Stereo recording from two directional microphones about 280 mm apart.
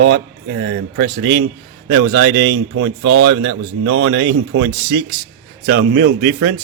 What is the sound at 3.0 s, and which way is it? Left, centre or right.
Speech, right.